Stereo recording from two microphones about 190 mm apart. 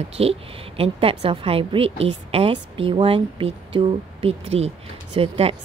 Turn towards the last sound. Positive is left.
turn(degrees=-30)  # may be behind; listen again after turning